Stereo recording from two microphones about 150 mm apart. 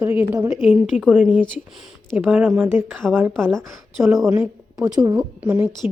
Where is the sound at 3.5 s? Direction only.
5° left (ahead or behind).